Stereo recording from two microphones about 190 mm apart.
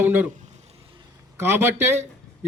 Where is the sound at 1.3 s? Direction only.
15° right (ahead or behind).